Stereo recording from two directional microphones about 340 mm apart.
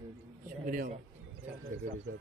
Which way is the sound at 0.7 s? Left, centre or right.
Right.